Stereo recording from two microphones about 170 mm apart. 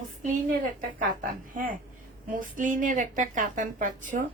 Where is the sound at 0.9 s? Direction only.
55° right (ahead or behind).